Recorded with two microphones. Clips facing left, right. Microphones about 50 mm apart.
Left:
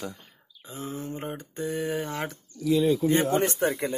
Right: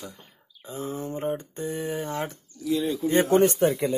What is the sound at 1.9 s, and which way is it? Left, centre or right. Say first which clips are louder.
Speech: right 1 dB; centre.